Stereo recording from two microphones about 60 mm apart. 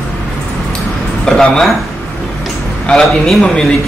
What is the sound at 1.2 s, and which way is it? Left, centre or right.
Speech, centre.